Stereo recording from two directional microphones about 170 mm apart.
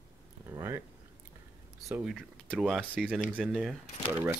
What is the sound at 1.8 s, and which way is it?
Speech, 10° right (ahead or behind).